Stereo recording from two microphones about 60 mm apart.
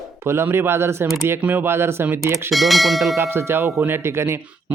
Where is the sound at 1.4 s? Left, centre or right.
Right.